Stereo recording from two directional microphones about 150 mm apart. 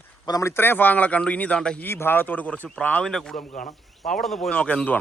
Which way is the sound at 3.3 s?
60° left (ahead or behind).